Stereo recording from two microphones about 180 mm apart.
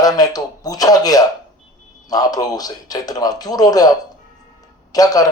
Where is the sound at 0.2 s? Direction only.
20° left (ahead or behind).